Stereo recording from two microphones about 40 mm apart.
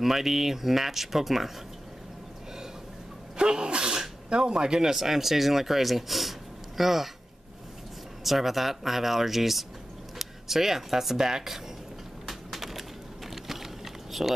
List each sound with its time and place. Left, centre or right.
0.0 s speech: centre
3.3 s speech: centre
8.2 s speech: centre
12.3 s a sound: centre